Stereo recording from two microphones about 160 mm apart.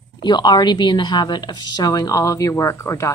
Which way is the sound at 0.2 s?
25° left (ahead or behind).